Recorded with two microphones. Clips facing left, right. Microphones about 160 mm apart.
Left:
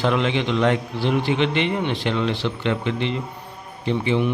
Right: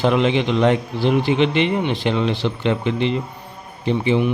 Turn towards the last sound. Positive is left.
turn(degrees=-20)  # may be behind; listen again after turning